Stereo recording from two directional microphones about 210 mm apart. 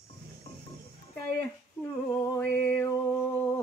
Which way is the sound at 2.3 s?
10° left (ahead or behind).